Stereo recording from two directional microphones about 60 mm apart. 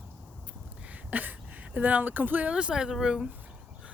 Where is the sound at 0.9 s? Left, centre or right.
Right.